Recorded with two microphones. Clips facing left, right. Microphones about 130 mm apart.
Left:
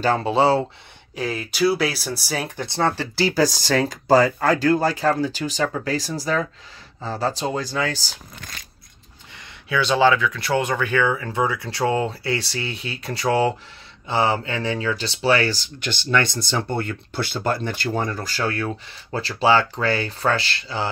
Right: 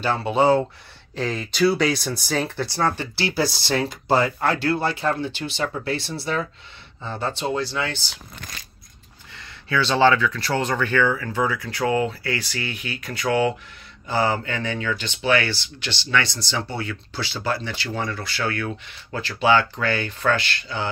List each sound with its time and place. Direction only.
0.0 s speech: 35° left (ahead or behind)
1.1 s speech: 10° left (ahead or behind); by 3.1 s 25° left (ahead or behind)
3.3 s speech: 45° left (ahead or behind)
9.4 s speech: 15° left (ahead or behind); by 20.9 s 30° left (ahead or behind)